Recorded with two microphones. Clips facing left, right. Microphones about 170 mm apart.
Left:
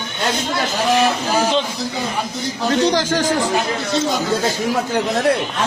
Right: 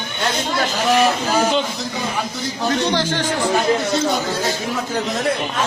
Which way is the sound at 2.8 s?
40° left (ahead or behind).